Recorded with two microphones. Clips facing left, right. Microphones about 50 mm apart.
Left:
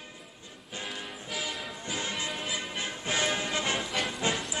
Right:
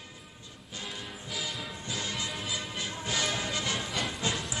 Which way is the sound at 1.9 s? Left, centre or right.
Left.